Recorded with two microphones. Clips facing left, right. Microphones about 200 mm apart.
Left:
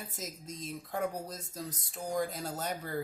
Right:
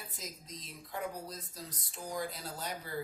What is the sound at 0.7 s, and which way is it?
Speech, 45° left (ahead or behind).